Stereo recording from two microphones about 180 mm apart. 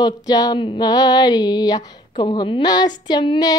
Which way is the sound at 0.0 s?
20° left (ahead or behind).